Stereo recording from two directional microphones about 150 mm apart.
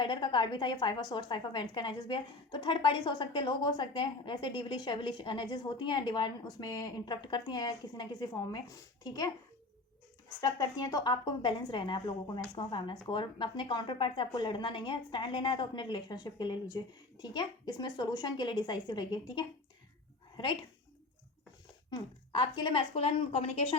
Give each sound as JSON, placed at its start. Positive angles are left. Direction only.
{"t": 0.0, "sound": "a woman's voice", "side_deg": 30}
{"t": 10.4, "sound": "a woman's voice", "side_deg": 25}
{"t": 21.8, "sound": "a woman's voice", "side_deg": 30}